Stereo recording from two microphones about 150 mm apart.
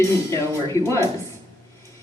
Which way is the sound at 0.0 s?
20° left (ahead or behind).